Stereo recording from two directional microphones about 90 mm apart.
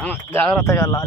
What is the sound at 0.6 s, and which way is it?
Speech, 30° left (ahead or behind).